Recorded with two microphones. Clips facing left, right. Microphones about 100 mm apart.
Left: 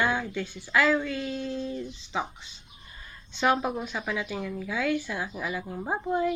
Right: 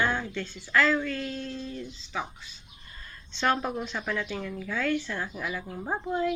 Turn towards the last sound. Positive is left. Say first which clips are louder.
# left 2 dB
turn(degrees=10)  # may be behind; listen again after turning